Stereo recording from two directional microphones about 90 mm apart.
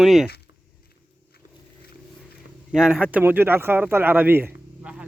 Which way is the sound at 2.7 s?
10° right (ahead or behind).